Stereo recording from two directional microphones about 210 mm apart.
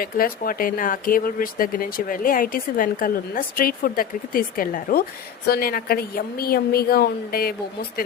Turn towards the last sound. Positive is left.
turn(degrees=45)  # may be behind; listen again after turning